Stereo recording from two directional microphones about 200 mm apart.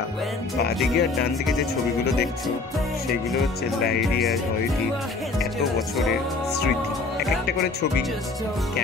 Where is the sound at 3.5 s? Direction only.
50° left (ahead or behind).